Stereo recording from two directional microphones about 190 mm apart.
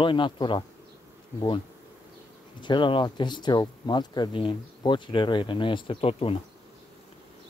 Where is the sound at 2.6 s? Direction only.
25° left (ahead or behind).